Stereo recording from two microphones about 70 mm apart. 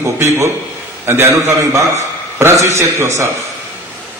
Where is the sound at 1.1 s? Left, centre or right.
Right.